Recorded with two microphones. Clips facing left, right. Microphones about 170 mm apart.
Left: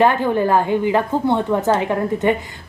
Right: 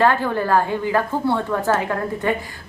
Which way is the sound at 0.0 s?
20° left (ahead or behind).